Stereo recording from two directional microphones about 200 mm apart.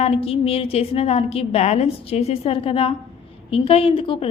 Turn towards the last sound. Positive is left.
turn(degrees=25)  # may be behind; listen again after turning